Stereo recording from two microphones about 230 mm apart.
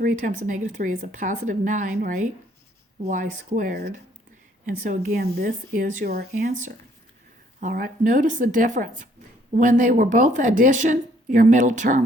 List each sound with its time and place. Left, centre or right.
0.0 s speech: right